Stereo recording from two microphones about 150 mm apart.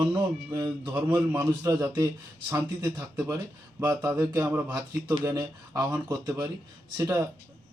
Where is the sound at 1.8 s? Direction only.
25° right (ahead or behind).